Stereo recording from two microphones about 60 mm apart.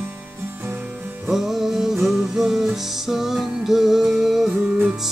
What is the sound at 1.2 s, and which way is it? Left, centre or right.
Music, centre.